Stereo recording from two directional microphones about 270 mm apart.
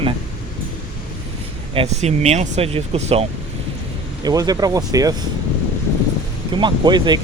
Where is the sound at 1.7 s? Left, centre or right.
Right.